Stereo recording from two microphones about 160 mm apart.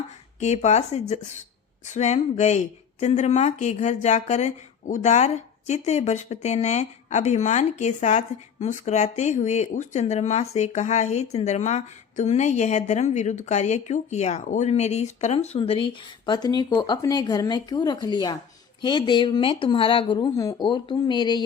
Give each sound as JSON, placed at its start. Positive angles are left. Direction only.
{"t": 0.3, "sound": "speech", "side_deg": 45}